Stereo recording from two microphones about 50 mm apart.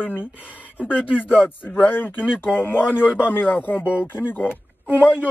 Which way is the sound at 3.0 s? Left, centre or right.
Right.